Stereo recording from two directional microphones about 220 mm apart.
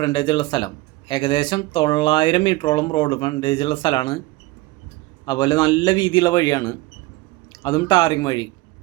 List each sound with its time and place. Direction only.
0.0 s speech: 20° left (ahead or behind)
5.2 s speech: 20° left (ahead or behind)